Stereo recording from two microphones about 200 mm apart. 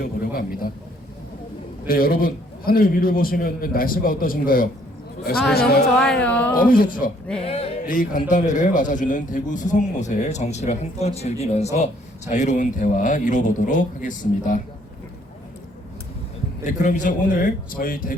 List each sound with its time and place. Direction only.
0.0 s a man's voice: 45° left (ahead or behind)
1.9 s a man's voice: 45° left (ahead or behind)
6.0 s speech: 5° left (ahead or behind)
6.7 s a man's voice: 45° left (ahead or behind)
7.3 s music: 30° left (ahead or behind)
7.9 s speech: 40° left (ahead or behind)
16.6 s a man's voice: 40° left (ahead or behind)